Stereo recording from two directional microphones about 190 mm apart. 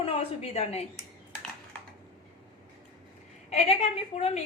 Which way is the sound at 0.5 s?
35° left (ahead or behind).